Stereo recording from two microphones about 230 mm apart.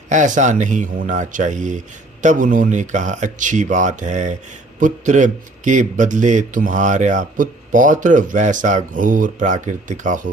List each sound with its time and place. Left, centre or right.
0.1 s speech: right